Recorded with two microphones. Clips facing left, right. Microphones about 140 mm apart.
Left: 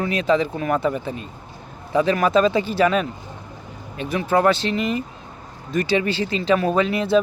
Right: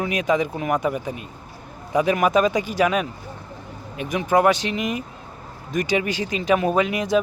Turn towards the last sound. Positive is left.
turn(degrees=-15)  # may be behind; listen again after turning